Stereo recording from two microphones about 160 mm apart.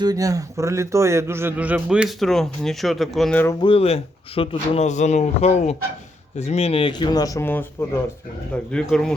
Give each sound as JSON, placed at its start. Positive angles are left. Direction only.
{"t": 0.0, "sound": "a man's voice", "side_deg": -25}
{"t": 3.6, "sound": "a man's voice", "side_deg": 35}